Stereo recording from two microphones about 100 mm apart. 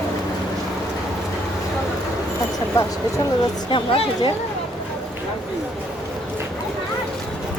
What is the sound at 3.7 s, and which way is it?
Speech, 55° left (ahead or behind).